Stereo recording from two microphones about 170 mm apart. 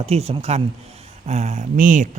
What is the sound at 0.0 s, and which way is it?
A man's voice, 35° right (ahead or behind).